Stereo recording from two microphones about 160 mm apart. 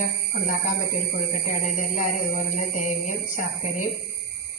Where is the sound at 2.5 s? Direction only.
50° left (ahead or behind).